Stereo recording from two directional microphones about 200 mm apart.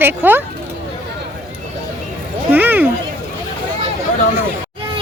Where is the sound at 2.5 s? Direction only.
10° right (ahead or behind).